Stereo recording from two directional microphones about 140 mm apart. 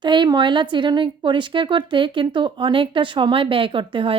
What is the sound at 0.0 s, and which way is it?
A woman's voice, 35° right (ahead or behind).